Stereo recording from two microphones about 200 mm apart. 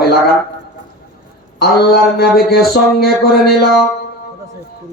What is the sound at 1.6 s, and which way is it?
Mantra, 50° left (ahead or behind).